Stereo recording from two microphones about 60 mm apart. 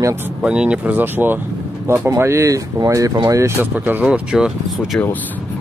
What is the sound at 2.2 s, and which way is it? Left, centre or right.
Speech, right.